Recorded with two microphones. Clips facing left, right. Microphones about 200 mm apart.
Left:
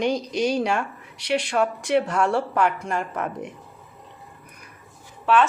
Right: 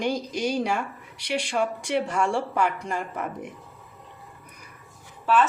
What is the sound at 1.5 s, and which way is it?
Speech, 65° left (ahead or behind).